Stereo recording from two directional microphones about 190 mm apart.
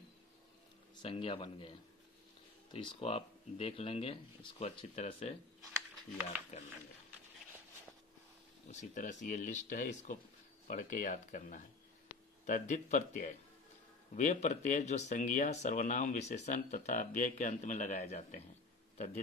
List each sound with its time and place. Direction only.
1.0 s a man's voice: 30° left (ahead or behind)
2.7 s speech: 30° left (ahead or behind)
8.6 s speech: 40° left (ahead or behind)